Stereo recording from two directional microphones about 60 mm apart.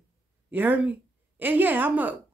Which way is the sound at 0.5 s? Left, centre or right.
Right.